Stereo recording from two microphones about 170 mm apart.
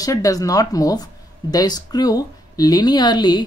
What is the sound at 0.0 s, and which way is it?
Speech, 20° left (ahead or behind).